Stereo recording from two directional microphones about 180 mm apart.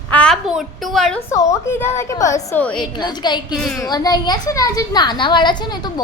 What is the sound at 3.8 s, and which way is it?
A woman's voice, 20° left (ahead or behind).